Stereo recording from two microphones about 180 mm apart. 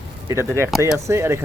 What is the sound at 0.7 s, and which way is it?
Speech, centre (ahead or behind).